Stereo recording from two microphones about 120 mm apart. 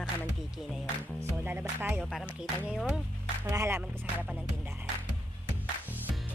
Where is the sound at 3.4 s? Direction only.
25° right (ahead or behind).